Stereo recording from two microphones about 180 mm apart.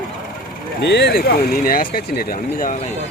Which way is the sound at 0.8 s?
65° left (ahead or behind).